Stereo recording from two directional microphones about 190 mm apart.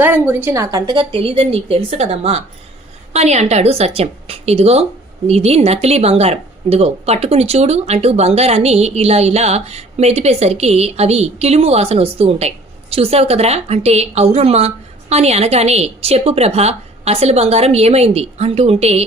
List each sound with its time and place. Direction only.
0.0 s a woman's voice: 10° right (ahead or behind); by 19.0 s 35° right (ahead or behind)